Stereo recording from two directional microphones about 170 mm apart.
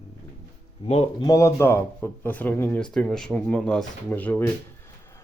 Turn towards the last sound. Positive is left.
turn(degrees=10)  # may be behind; listen again after turning